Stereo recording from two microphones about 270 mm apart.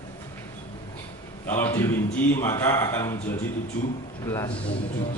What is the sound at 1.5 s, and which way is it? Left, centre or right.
Mantra, centre.